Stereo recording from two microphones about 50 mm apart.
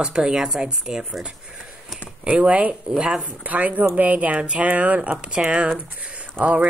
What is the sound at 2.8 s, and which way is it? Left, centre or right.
Speech, centre.